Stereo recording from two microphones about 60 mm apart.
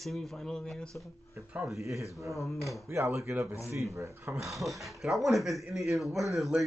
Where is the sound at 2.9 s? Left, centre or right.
Right.